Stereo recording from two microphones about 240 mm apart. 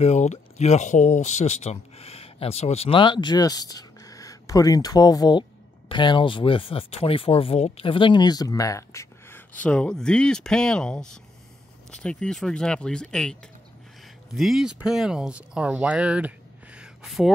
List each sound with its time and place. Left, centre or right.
0.0 s speech: left; by 17.3 s centre